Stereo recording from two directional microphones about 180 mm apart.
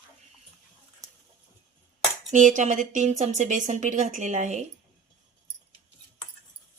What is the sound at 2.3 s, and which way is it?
A woman's voice, 45° right (ahead or behind).